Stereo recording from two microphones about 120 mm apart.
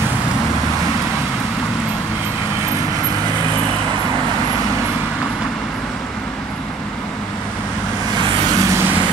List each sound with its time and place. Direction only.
8.2 s vehicle: 30° right (ahead or behind)